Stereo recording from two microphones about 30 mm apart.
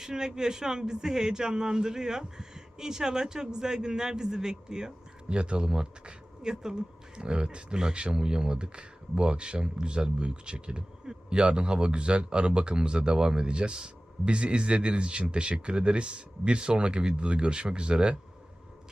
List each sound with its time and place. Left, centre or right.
0.0 s speech: right
5.3 s speech: right